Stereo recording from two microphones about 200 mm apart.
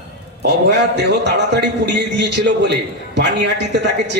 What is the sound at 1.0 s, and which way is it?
A man's voice, 60° right (ahead or behind).